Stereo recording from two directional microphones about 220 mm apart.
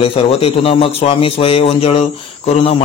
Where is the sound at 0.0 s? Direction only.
25° left (ahead or behind).